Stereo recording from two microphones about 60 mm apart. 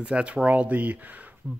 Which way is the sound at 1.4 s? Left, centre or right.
Centre.